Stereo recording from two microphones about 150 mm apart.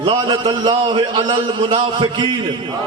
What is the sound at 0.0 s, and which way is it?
A man's voice, 35° right (ahead or behind).